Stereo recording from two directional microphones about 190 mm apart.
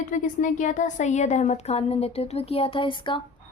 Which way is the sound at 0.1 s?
40° left (ahead or behind).